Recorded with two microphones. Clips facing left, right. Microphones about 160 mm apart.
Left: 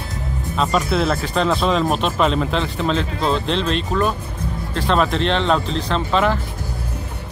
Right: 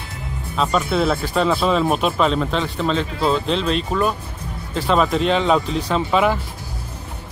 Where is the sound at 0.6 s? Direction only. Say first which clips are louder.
Even; centre (ahead or behind).